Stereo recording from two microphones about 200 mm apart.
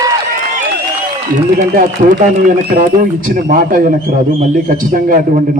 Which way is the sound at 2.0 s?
35° right (ahead or behind).